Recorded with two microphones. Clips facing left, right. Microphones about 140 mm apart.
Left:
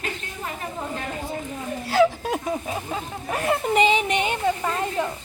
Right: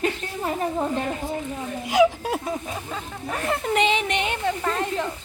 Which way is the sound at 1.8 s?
10° right (ahead or behind).